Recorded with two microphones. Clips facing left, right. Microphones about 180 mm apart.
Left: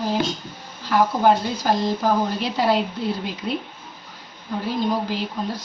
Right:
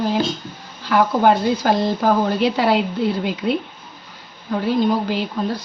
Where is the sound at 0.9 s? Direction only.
65° right (ahead or behind).